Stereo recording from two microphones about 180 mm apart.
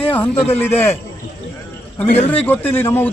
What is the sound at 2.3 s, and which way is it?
Speech, 10° left (ahead or behind).